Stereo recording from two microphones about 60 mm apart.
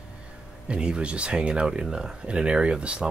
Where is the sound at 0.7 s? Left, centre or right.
Centre.